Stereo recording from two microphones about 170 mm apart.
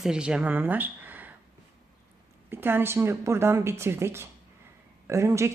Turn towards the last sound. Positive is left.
turn(degrees=-15)  # may be behind; listen again after turning